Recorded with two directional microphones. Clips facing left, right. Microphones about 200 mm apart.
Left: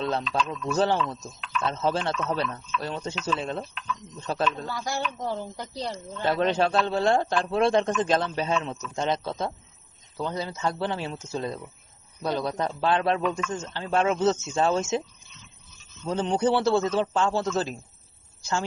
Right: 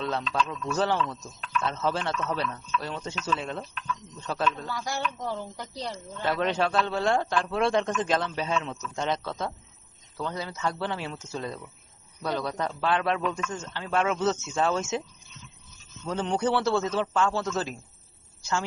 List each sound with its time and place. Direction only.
0.0 s a man's voice: 30° left (ahead or behind)
16.0 s a man's voice: 25° left (ahead or behind)